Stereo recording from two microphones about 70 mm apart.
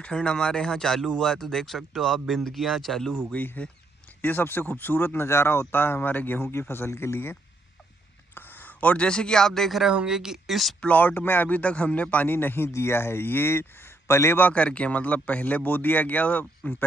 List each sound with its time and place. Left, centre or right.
0.0 s speech: centre
3.3 s a man's voice: left
8.4 s a man's voice: left; by 10.8 s centre
10.8 s a man's voice: left
14.5 s speech: centre